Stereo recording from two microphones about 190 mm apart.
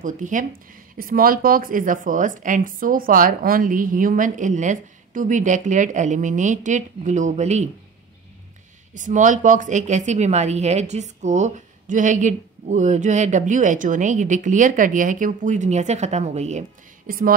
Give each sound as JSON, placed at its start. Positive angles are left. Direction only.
{"t": 0.0, "sound": "speech", "side_deg": -45}
{"t": 8.9, "sound": "a woman's voice", "side_deg": -40}